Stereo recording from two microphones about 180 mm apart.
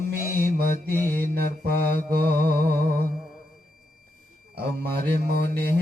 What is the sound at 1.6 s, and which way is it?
Mantra, 60° right (ahead or behind).